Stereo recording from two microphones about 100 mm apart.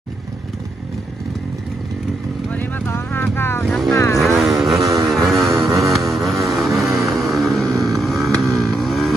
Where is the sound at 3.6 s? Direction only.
5° left (ahead or behind).